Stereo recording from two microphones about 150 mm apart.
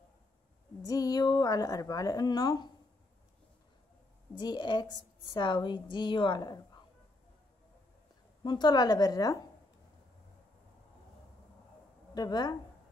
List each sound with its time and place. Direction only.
0.8 s a woman's voice: 25° left (ahead or behind)
4.4 s a woman's voice: 30° left (ahead or behind)
8.5 s a woman's voice: 30° left (ahead or behind)
12.1 s a woman's voice: 25° left (ahead or behind)